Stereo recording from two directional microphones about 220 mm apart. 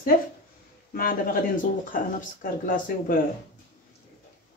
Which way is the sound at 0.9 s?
40° left (ahead or behind).